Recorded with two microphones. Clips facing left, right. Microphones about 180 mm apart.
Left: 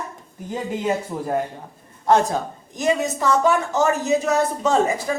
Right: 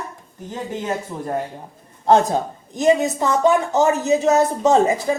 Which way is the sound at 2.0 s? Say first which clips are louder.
Right 2 dB; 25° right (ahead or behind).